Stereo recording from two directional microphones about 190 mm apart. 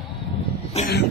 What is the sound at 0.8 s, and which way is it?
Speech, 35° left (ahead or behind).